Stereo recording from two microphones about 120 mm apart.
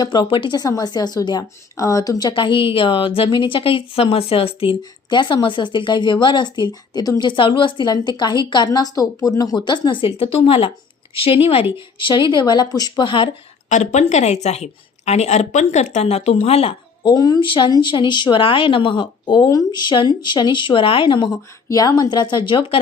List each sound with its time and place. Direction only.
0.0 s speech: 40° left (ahead or behind)
0.6 s a woman's voice: 30° left (ahead or behind); by 4.8 s 50° left (ahead or behind)
4.8 s speech: 40° left (ahead or behind)
13.7 s a woman's voice: 80° left; by 16.7 s 55° left (ahead or behind)
17.0 s speech: 35° left (ahead or behind)
21.7 s speech: 30° left (ahead or behind); by 22.8 s 45° left (ahead or behind)